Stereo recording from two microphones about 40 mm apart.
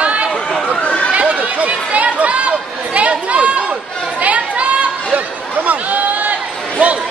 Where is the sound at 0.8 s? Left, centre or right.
Left.